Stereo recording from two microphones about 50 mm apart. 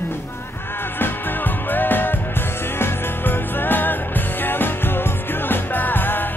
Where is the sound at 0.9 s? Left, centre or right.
Left.